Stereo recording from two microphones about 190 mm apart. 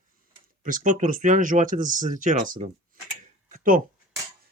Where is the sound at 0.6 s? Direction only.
45° right (ahead or behind).